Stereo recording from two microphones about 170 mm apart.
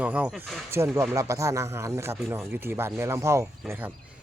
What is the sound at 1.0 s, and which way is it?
Speech, 20° right (ahead or behind).